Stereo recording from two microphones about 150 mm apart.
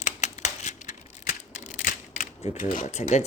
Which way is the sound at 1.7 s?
60° left (ahead or behind).